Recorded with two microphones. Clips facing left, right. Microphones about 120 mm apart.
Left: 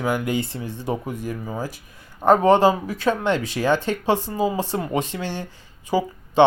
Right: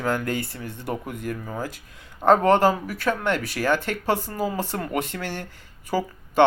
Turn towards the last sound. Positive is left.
turn(degrees=15)  # may be behind; listen again after turning